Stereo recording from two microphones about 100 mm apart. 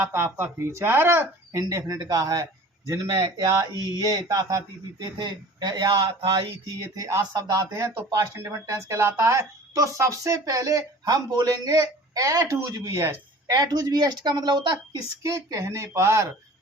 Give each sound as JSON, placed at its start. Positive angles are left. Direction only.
{"t": 0.0, "sound": "speech", "side_deg": -25}
{"t": 1.5, "sound": "speech", "side_deg": -35}
{"t": 3.8, "sound": "speech", "side_deg": -40}
{"t": 6.7, "sound": "speech", "side_deg": -35}
{"t": 13.5, "sound": "speech", "side_deg": -40}
{"t": 15.2, "sound": "speech", "side_deg": -30}